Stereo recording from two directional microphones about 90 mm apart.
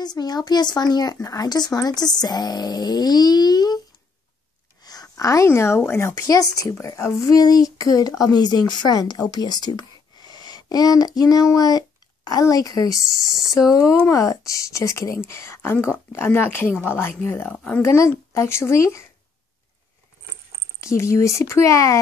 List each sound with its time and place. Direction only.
0.0 s speech: 50° left (ahead or behind)
4.8 s a sound: 40° left (ahead or behind)
5.9 s a woman's voice: 30° left (ahead or behind)
6.1 s speech: 45° left (ahead or behind)
13.0 s speech: 5° right (ahead or behind)
13.6 s a woman's voice: 40° left (ahead or behind); by 17.5 s 25° left (ahead or behind)
17.5 s speech: 15° left (ahead or behind)
17.8 s speech: 30° left (ahead or behind)
20.8 s speech: 35° left (ahead or behind)